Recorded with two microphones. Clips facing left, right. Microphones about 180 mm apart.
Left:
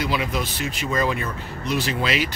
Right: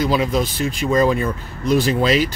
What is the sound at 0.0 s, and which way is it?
Speech, 40° right (ahead or behind).